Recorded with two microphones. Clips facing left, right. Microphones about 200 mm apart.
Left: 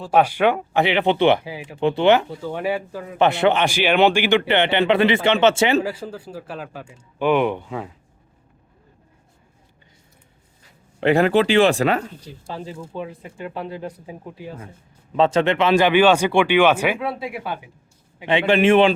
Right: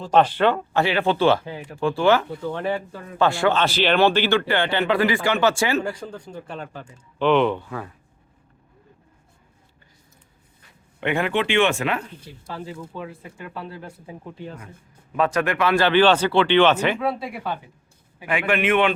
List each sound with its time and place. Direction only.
0.0 s speech: 10° left (ahead or behind)
5.8 s speech: 5° left (ahead or behind)
11.0 s speech: 35° left (ahead or behind)
12.5 s speech: 20° left (ahead or behind); by 14.6 s 5° left (ahead or behind)
15.1 s speech: 25° left (ahead or behind); by 17.7 s 5° left (ahead or behind)
18.2 s speech: 25° left (ahead or behind)